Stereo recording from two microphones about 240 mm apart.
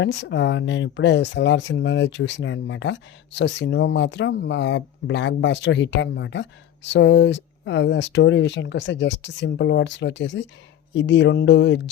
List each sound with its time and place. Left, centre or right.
0.0 s speech: left